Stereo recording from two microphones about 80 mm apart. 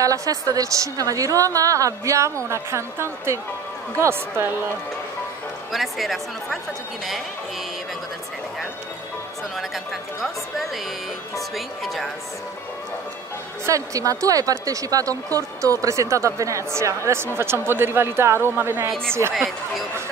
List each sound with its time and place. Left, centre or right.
0.0 s a woman's voice: right
5.7 s a woman's voice: centre
11.5 s a woman's voice: centre
13.7 s speech: right
19.3 s a woman's voice: centre